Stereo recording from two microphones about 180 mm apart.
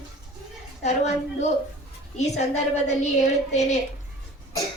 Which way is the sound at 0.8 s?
40° left (ahead or behind).